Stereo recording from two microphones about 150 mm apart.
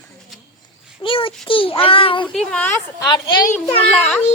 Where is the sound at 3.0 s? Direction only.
30° left (ahead or behind).